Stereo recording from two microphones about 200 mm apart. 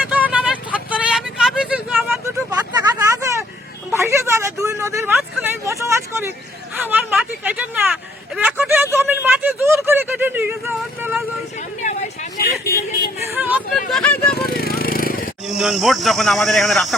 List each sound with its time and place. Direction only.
0.0 s vehicle: 5° right (ahead or behind)
2.2 s vehicle: 15° right (ahead or behind)
3.9 s speech: 15° right (ahead or behind)
11.8 s vehicle: 40° left (ahead or behind)
13.3 s hubbub: 10° right (ahead or behind)
13.9 s vehicle: 5° left (ahead or behind)
14.3 s vehicle: 50° left (ahead or behind)
15.4 s speech: centre (ahead or behind)